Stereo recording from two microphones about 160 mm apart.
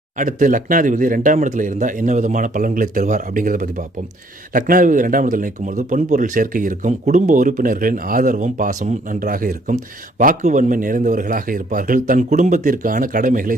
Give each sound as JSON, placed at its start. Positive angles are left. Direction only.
{"t": 0.2, "sound": "speech", "side_deg": -55}